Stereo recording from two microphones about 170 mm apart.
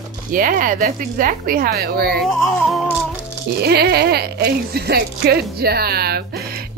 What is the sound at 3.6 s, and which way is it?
Speech, 70° right (ahead or behind).